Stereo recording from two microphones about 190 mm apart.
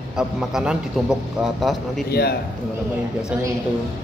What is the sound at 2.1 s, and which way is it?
Speech, 55° left (ahead or behind).